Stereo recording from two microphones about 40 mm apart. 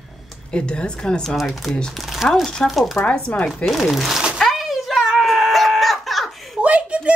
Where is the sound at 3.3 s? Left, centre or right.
Left.